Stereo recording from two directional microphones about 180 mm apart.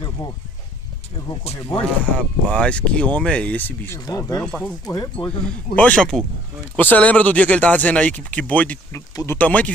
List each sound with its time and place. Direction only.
1.7 s speech: 5° left (ahead or behind)
4.4 s speech: 5° left (ahead or behind)
5.2 s a man's voice: 20° left (ahead or behind)
5.8 s speech: 5° left (ahead or behind)